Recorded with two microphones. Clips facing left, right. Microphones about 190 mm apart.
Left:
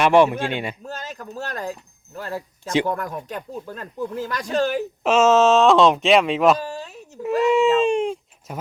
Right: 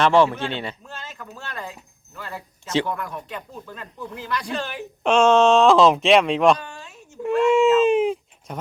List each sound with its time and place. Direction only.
0.0 s speech: 15° left (ahead or behind)
0.9 s speech: 40° left (ahead or behind)
5.0 s speech: 5° left (ahead or behind)
6.7 s a sound: 35° left (ahead or behind)
7.2 s speech: centre (ahead or behind)
7.8 s a sound: 5° right (ahead or behind)